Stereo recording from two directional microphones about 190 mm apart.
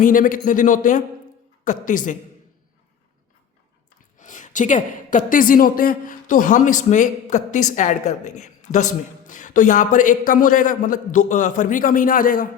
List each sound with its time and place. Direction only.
0.0 s a man's voice: 45° left (ahead or behind)
4.2 s a woman's voice: 40° left (ahead or behind)